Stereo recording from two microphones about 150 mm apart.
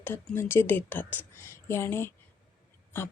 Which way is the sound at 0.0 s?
15° left (ahead or behind).